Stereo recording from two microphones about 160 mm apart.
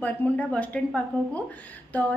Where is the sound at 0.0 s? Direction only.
10° left (ahead or behind).